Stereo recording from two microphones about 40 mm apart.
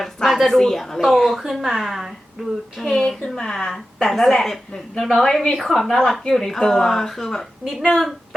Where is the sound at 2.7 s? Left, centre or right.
Centre.